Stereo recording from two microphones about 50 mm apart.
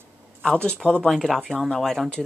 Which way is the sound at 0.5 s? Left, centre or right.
Left.